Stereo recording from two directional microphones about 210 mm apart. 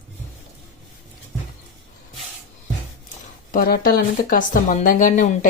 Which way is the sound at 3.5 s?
45° left (ahead or behind).